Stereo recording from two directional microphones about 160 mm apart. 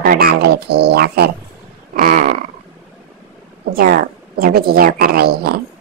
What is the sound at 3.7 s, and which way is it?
A woman's voice, 65° right (ahead or behind).